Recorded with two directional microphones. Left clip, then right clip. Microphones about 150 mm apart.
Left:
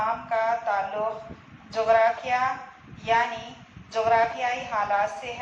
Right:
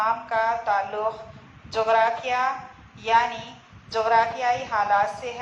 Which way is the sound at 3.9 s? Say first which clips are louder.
Right 1 dB; 35° right (ahead or behind).